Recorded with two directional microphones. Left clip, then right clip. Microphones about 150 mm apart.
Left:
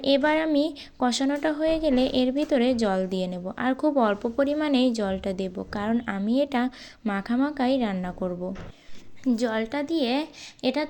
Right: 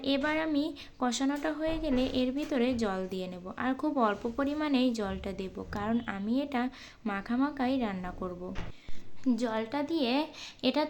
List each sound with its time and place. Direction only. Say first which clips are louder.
0.0 s a woman's voice: left 8 dB; 35° left (ahead or behind); by 10.8 s 15° left (ahead or behind)